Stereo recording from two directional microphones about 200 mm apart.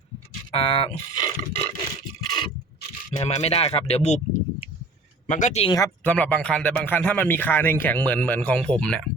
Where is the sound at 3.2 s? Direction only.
35° left (ahead or behind).